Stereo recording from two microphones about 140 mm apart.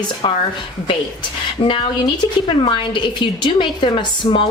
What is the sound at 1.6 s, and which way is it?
A woman's voice, 35° left (ahead or behind).